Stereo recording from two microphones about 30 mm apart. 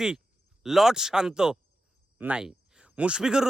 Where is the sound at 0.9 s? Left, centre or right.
Right.